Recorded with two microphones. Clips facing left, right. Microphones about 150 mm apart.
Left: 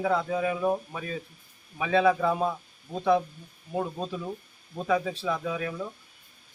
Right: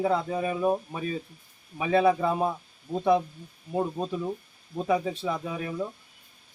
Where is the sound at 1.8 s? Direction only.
25° right (ahead or behind).